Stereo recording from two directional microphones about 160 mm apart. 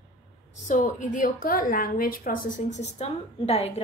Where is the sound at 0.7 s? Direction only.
55° left (ahead or behind).